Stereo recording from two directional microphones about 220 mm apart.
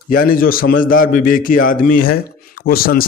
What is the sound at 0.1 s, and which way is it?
A man's voice, 40° left (ahead or behind).